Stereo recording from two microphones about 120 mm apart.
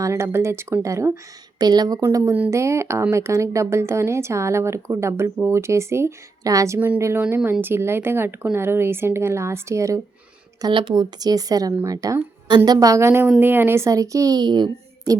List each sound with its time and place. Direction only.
0.0 s speech: 25° right (ahead or behind)
6.7 s a woman's voice: 15° right (ahead or behind)
10.6 s speech: 45° right (ahead or behind)